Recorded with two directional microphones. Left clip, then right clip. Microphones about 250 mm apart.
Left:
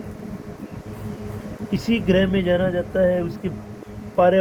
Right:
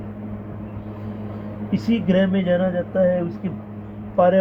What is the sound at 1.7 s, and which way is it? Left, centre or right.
Speech, left.